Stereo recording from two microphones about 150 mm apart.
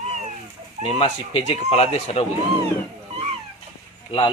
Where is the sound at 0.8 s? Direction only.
40° left (ahead or behind).